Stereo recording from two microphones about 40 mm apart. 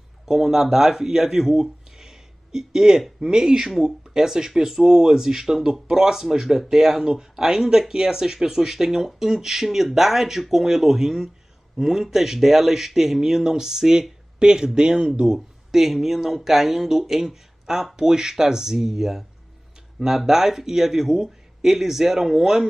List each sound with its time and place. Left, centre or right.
0.2 s speech: centre